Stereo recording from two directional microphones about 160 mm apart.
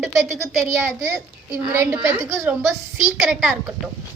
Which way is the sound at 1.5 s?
15° right (ahead or behind).